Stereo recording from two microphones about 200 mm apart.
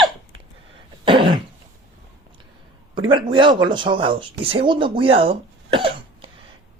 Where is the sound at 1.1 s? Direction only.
25° right (ahead or behind).